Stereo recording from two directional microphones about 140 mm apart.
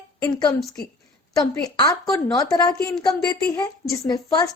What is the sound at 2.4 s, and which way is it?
Speech, 25° left (ahead or behind).